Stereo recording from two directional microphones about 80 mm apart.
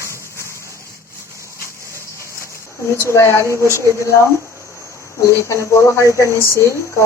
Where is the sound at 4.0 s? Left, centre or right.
Left.